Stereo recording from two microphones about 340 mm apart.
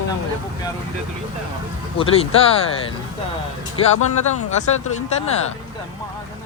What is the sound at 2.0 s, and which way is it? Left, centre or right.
Speech, centre.